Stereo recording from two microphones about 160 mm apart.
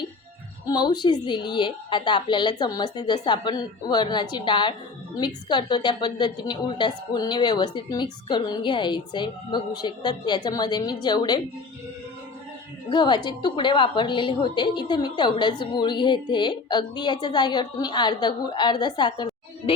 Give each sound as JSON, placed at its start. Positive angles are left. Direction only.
{"t": 0.7, "sound": "a woman's voice", "side_deg": 25}
{"t": 12.9, "sound": "a woman's voice", "side_deg": 30}